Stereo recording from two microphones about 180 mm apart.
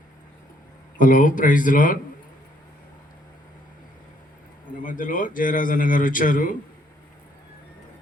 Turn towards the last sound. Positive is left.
turn(degrees=50)  # may be behind; listen again after turning